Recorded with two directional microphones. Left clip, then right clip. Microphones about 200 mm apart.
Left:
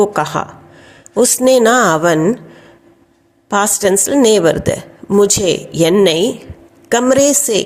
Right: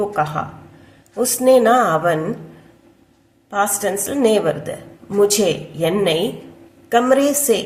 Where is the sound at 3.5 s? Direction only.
45° left (ahead or behind).